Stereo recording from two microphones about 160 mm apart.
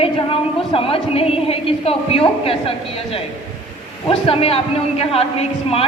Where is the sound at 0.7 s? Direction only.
35° left (ahead or behind).